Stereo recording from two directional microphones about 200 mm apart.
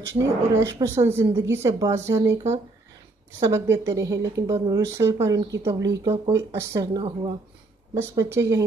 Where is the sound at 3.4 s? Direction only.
15° right (ahead or behind).